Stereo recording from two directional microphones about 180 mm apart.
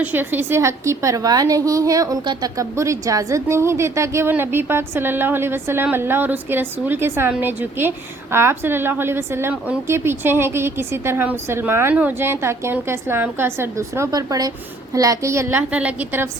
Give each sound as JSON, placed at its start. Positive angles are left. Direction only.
{"t": 0.0, "sound": "a woman's voice", "side_deg": -10}